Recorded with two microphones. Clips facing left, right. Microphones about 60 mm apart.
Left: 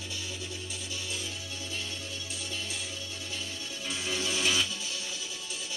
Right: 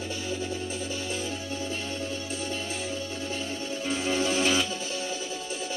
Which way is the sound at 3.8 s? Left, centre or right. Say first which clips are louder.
Right 7 dB; right.